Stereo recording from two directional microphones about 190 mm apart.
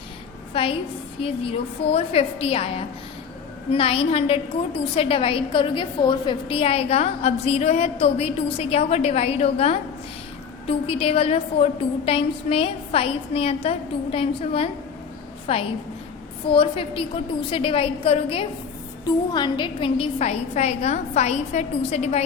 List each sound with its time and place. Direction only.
0.5 s a woman's voice: 30° left (ahead or behind)